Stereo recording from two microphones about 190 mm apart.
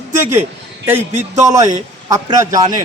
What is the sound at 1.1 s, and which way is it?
Speech, 40° right (ahead or behind).